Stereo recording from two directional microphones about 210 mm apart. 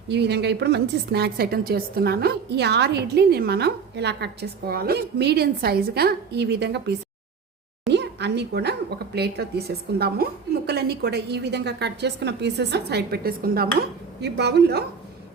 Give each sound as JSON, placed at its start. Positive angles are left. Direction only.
{"t": 0.1, "sound": "a woman's voice", "side_deg": -50}
{"t": 7.9, "sound": "a sound", "side_deg": -55}
{"t": 9.1, "sound": "a woman's voice", "side_deg": -50}